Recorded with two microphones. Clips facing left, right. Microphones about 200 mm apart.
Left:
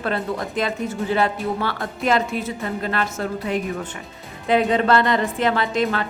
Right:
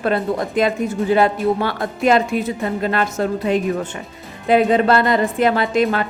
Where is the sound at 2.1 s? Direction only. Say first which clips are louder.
Right 5 dB; 15° right (ahead or behind).